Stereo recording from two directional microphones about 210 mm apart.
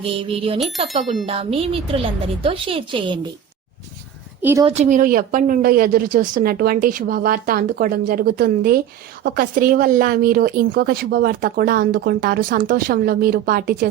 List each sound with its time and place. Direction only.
0.0 s a woman's voice: 25° right (ahead or behind)
1.0 s speech: centre (ahead or behind)
1.3 s a woman's voice: 25° right (ahead or behind)
4.6 s a woman's voice: 35° right (ahead or behind)